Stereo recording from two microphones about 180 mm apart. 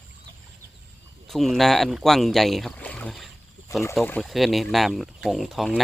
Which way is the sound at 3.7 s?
15° left (ahead or behind).